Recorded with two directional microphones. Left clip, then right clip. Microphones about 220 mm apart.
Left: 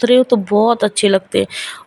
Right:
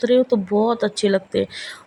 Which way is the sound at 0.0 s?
25° left (ahead or behind).